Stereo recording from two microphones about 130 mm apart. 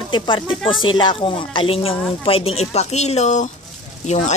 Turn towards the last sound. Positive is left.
turn(degrees=60)  # may be behind; listen again after turning